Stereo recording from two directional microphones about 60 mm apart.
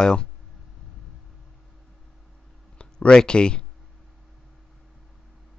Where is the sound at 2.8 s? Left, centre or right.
Centre.